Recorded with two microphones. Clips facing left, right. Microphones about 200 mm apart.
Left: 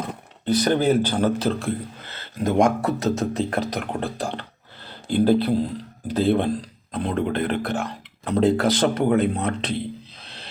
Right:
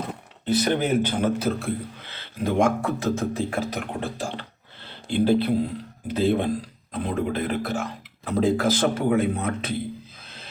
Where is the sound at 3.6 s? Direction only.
35° left (ahead or behind).